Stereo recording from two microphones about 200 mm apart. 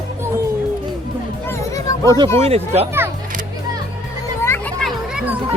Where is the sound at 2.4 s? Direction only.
30° right (ahead or behind).